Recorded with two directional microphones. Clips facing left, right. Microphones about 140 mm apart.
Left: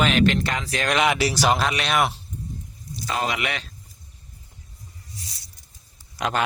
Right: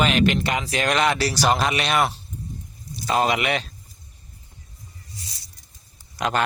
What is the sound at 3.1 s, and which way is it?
Speech, 25° right (ahead or behind).